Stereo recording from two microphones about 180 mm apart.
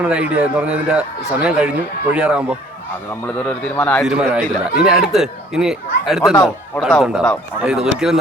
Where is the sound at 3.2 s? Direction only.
10° left (ahead or behind).